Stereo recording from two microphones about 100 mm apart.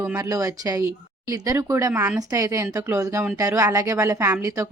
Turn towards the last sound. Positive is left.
turn(degrees=-30)  # may be behind; listen again after turning